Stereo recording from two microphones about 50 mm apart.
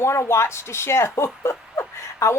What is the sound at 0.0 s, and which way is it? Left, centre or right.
A woman's voice, left.